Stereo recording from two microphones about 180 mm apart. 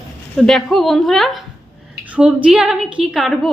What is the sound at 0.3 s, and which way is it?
Speech, centre (ahead or behind).